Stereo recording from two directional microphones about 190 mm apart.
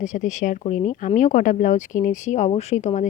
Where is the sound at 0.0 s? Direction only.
40° left (ahead or behind).